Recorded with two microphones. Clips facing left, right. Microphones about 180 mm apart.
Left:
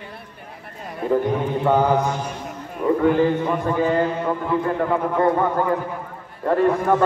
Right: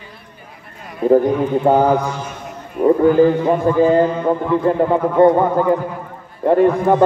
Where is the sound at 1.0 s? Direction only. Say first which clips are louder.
Right 7 dB; 40° right (ahead or behind).